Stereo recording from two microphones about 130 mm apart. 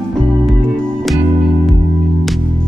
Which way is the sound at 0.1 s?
5° left (ahead or behind).